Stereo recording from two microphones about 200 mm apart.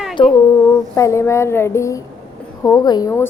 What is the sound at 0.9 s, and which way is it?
A woman's voice, 15° left (ahead or behind).